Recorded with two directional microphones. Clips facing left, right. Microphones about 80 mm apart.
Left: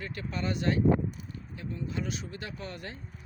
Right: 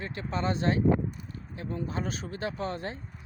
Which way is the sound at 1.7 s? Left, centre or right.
Right.